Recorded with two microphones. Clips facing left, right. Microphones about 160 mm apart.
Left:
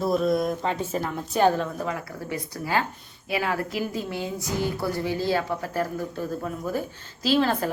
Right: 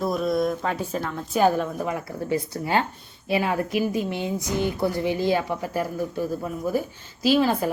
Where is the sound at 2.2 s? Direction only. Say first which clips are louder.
Right 5 dB; 25° right (ahead or behind).